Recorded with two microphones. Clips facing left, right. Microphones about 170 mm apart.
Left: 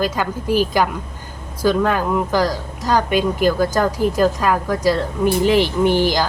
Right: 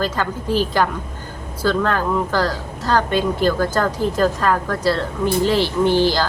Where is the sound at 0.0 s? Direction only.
10° left (ahead or behind).